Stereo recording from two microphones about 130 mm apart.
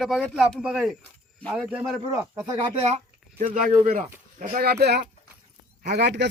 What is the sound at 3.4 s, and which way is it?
Speech, 90° right.